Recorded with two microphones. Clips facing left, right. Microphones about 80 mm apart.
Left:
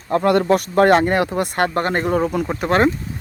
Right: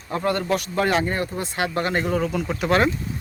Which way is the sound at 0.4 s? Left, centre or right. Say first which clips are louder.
Left 8 dB; left.